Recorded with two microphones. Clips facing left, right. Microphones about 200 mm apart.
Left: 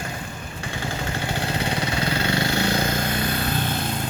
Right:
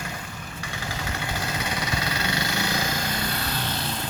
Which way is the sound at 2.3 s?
55° left (ahead or behind).